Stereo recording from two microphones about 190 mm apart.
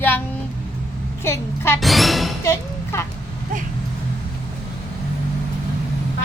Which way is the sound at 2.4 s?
15° left (ahead or behind).